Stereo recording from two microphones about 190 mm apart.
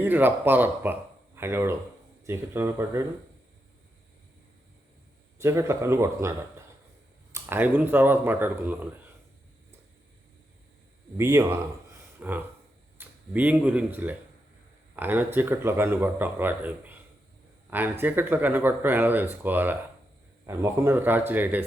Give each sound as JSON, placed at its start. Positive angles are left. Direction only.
{"t": 0.0, "sound": "speech", "side_deg": -10}
{"t": 5.4, "sound": "speech", "side_deg": -15}
{"t": 7.3, "sound": "speech", "side_deg": -10}
{"t": 11.2, "sound": "speech", "side_deg": -15}